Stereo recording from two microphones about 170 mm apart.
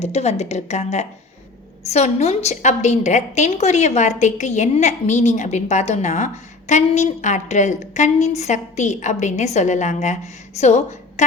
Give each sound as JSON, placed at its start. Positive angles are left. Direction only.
{"t": 0.0, "sound": "a woman's voice", "side_deg": 40}